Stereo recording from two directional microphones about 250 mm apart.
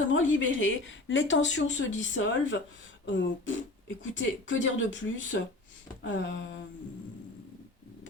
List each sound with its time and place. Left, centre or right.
0.1 s speech: left